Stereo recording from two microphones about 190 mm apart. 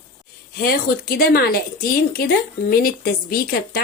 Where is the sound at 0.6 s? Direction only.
50° left (ahead or behind).